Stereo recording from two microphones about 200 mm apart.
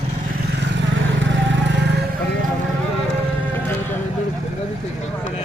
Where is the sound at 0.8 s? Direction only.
65° right (ahead or behind).